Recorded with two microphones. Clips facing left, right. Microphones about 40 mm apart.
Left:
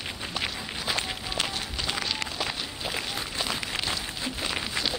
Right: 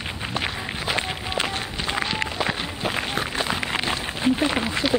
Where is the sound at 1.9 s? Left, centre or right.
Right.